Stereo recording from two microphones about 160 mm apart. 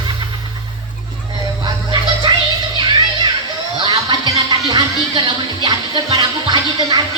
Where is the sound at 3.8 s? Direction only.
25° right (ahead or behind).